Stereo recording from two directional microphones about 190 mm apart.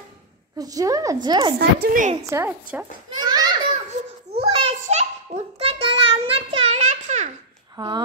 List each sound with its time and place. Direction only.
0.6 s a woman's voice: 20° right (ahead or behind)
1.6 s a woman's voice: 55° right (ahead or behind)
2.2 s a woman's voice: 15° right (ahead or behind)
3.2 s a sound: 20° right (ahead or behind); by 7.2 s 40° right (ahead or behind)
7.7 s speech: 25° right (ahead or behind)